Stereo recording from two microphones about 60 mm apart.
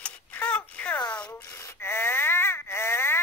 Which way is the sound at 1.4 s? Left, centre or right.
Left.